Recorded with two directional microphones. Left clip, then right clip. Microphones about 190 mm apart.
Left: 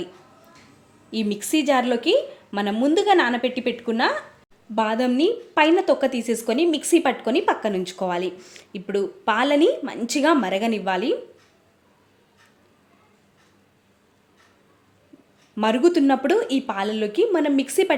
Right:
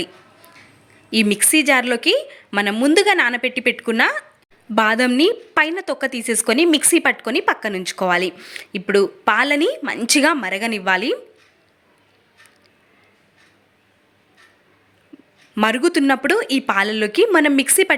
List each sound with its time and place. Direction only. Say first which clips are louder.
1.1 s a woman's voice: right 7 dB; 15° right (ahead or behind)
15.5 s a woman's voice: right 2 dB; 15° right (ahead or behind)